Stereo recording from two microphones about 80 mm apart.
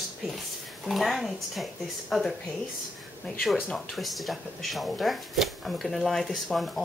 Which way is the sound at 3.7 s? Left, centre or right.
Centre.